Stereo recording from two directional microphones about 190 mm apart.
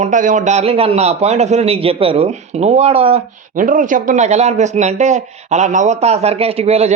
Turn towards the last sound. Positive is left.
turn(degrees=-35)  # may be behind; listen again after turning